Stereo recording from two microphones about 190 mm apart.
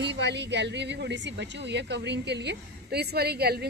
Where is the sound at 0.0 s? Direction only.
65° right (ahead or behind).